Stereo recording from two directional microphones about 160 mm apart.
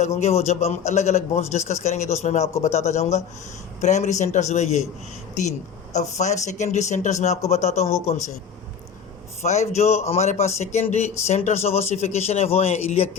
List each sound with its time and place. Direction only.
0.0 s speech: 45° left (ahead or behind)
5.9 s speech: 45° left (ahead or behind)
9.4 s speech: 45° left (ahead or behind)